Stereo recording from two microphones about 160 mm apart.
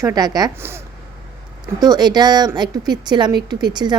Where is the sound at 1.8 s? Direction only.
25° right (ahead or behind).